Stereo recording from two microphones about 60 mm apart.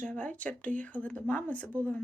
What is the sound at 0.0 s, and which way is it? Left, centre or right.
Speech, left.